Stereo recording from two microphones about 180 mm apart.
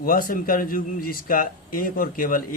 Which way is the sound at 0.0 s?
50° left (ahead or behind).